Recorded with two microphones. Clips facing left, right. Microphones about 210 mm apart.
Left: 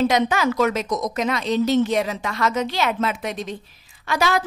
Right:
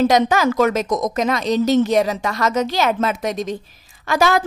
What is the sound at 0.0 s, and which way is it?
A woman's voice, 40° right (ahead or behind).